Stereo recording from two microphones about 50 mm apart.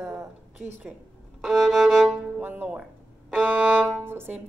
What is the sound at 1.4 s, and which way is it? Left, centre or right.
Violin, centre.